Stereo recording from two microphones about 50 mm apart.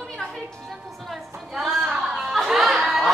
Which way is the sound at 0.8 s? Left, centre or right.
Centre.